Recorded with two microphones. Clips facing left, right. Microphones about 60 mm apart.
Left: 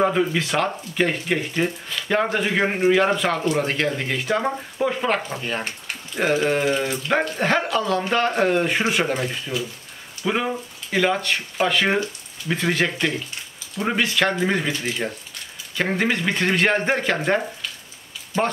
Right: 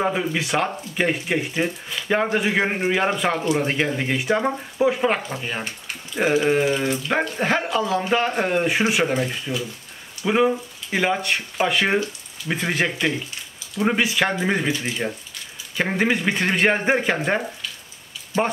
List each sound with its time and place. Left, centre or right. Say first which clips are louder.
0.0 s speech: left 3 dB; centre